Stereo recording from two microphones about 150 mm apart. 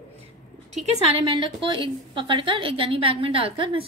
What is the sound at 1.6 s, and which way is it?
A woman's voice, 35° right (ahead or behind).